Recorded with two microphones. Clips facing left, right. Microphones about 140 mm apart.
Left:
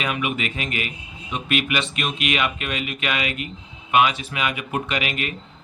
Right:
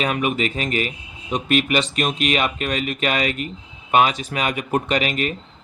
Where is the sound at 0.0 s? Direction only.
40° right (ahead or behind).